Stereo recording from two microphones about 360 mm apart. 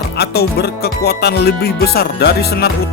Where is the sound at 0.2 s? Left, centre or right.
Left.